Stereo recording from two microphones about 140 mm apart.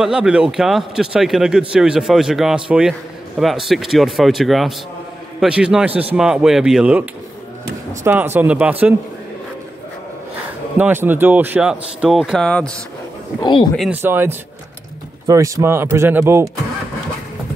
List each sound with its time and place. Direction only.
0.0 s a man's voice: 5° right (ahead or behind)
10.8 s speech: 15° right (ahead or behind); by 12.7 s 5° left (ahead or behind)
13.4 s speech: 35° left (ahead or behind)
14.0 s speech: 15° right (ahead or behind)